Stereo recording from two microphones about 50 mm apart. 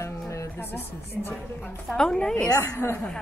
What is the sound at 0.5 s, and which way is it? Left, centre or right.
Speech, left.